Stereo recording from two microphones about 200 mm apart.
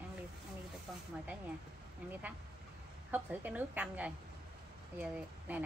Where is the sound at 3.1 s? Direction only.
10° right (ahead or behind).